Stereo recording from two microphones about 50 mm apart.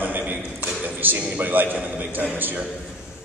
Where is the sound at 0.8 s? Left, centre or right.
Right.